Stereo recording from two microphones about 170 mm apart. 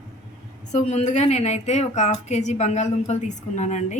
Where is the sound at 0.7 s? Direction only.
40° left (ahead or behind).